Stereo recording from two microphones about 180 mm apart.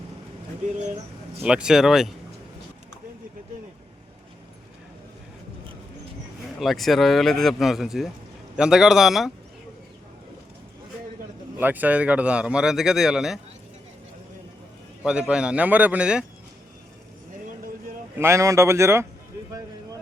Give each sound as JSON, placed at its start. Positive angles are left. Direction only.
{"t": 1.4, "sound": "speech", "side_deg": -5}
{"t": 6.6, "sound": "speech", "side_deg": 0}
{"t": 11.6, "sound": "speech", "side_deg": -10}
{"t": 15.0, "sound": "speech", "side_deg": -5}
{"t": 18.2, "sound": "speech", "side_deg": -15}